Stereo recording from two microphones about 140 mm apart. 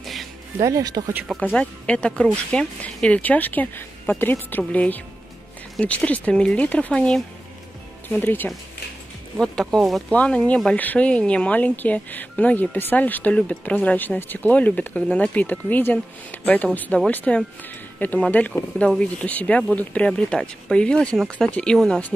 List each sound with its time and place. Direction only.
0.0 s music: centre (ahead or behind)
0.6 s speech: 25° right (ahead or behind)
1.1 s speech: 10° right (ahead or behind)
1.4 s speech: 10° left (ahead or behind)
9.4 s speech: 5° left (ahead or behind)